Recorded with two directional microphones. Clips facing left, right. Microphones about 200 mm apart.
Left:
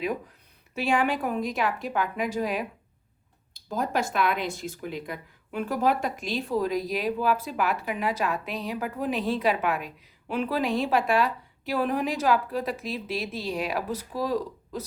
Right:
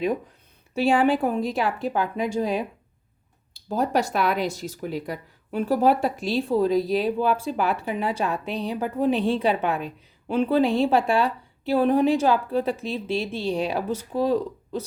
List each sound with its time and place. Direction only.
0.8 s a woman's voice: 30° right (ahead or behind)
3.7 s a woman's voice: 35° right (ahead or behind)